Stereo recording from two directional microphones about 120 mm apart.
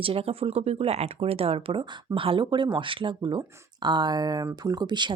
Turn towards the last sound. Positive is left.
turn(degrees=-35)  # may be behind; listen again after turning